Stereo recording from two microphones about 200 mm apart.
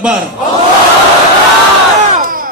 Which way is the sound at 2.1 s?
45° right (ahead or behind).